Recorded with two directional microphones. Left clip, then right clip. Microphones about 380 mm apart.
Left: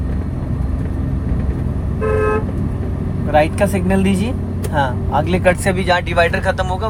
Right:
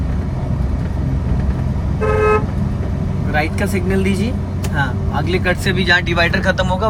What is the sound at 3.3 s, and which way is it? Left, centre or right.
Speech, centre.